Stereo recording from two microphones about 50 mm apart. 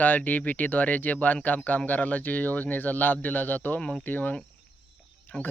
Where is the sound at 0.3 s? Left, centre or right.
Left.